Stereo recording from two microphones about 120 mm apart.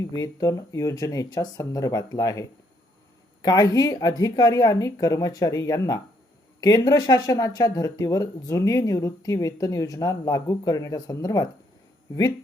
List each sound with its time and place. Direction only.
0.1 s speech: 30° left (ahead or behind)